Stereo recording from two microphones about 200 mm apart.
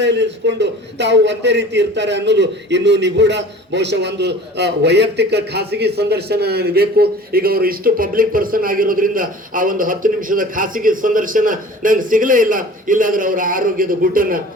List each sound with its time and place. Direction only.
0.0 s a man's voice: 60° right (ahead or behind); by 14.3 s 45° right (ahead or behind)